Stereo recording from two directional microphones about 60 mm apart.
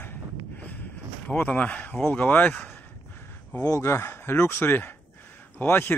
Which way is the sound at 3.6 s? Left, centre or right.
Left.